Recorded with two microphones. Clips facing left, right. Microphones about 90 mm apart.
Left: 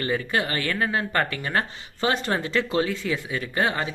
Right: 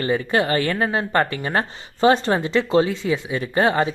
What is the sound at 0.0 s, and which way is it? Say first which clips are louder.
Speech: right 5 dB; 30° right (ahead or behind).